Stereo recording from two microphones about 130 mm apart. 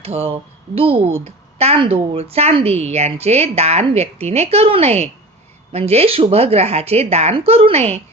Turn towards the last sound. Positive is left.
turn(degrees=-55)  # may be behind; listen again after turning